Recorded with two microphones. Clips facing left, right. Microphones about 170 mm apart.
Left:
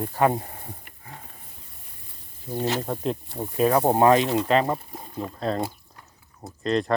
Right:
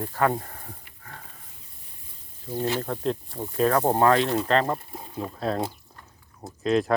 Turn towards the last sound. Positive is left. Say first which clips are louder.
# right 1 dB
turn(degrees=0)  # may be behind; listen again after turning